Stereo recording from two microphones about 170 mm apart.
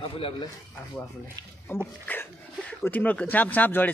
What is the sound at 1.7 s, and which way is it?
Speech, 15° left (ahead or behind).